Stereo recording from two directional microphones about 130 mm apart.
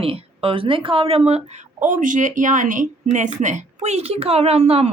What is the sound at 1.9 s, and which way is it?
Speech, 85° right.